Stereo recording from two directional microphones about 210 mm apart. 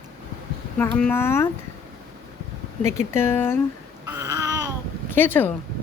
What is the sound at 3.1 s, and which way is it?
Speech, 10° left (ahead or behind).